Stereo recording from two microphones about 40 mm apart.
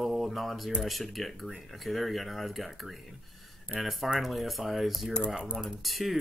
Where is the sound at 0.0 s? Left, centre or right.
Centre.